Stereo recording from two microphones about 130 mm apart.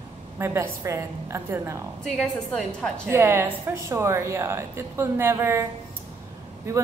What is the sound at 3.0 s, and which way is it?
A woman's voice, 20° right (ahead or behind).